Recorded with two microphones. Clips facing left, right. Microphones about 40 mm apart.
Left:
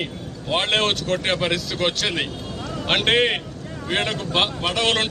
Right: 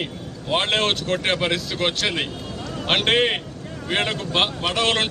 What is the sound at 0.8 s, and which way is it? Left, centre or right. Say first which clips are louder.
Speech: even; centre.